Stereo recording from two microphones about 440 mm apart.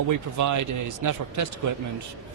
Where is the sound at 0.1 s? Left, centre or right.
Right.